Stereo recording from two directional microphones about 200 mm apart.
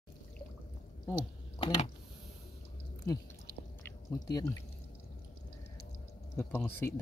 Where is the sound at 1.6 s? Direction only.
25° left (ahead or behind).